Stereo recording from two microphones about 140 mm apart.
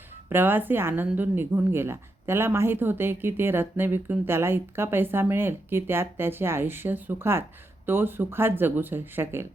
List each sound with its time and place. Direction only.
0.3 s speech: 15° right (ahead or behind)